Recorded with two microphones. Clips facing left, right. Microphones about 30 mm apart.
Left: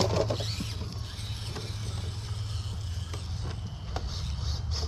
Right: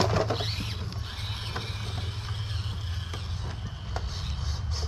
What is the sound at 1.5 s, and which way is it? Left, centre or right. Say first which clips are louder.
Vehicle: right 4 dB; right.